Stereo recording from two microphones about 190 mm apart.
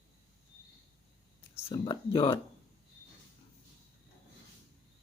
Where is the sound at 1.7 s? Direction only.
30° left (ahead or behind).